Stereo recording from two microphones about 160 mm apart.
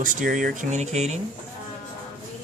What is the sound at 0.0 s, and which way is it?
Speech, 55° right (ahead or behind).